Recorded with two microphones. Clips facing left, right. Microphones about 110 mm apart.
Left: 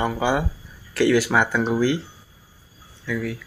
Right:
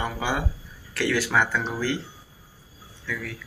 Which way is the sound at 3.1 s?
10° left (ahead or behind).